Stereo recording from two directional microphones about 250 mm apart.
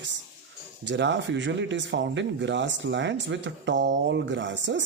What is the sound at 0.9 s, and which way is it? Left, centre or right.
Speech, right.